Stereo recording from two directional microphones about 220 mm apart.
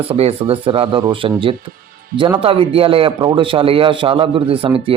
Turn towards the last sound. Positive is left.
turn(degrees=-25)  # may be behind; listen again after turning